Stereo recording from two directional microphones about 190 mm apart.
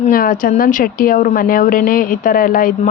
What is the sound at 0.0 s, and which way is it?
A woman's voice, 45° left (ahead or behind).